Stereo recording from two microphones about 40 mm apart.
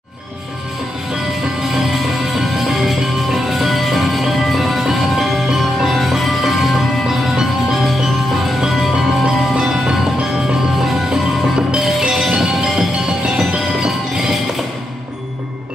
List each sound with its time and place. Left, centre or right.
1.7 s music: centre
11.5 s music: right
12.4 s bell: centre
13.8 s music: centre